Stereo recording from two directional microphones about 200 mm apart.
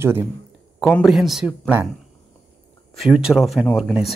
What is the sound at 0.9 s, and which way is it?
Speech, centre (ahead or behind).